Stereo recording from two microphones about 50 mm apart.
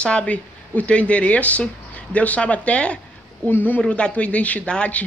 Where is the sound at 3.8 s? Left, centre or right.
Left.